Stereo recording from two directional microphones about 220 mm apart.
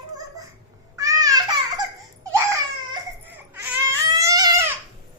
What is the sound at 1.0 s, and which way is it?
Babbling, 15° right (ahead or behind).